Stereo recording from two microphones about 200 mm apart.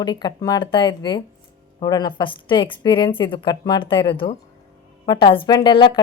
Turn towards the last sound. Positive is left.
turn(degrees=25)  # may be behind; listen again after turning